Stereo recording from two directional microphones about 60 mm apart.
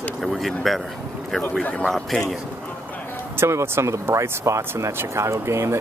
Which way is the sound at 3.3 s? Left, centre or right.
Right.